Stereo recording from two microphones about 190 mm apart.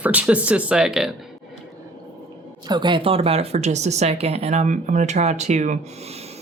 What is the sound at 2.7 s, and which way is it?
Speech, 25° right (ahead or behind).